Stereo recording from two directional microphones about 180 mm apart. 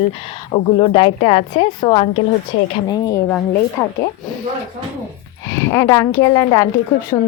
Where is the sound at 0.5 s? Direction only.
30° left (ahead or behind); by 3.4 s 15° left (ahead or behind).